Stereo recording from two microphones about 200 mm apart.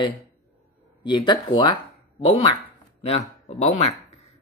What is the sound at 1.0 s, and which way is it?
Speech, 20° left (ahead or behind).